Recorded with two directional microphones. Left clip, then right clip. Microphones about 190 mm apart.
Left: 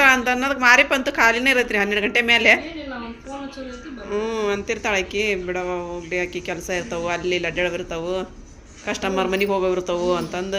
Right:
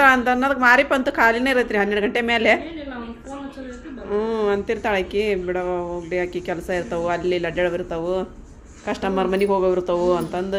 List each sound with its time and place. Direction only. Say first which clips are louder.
0.0 s speech: right 1 dB; 25° right (ahead or behind)
4.1 s speech: right 2 dB; 25° right (ahead or behind)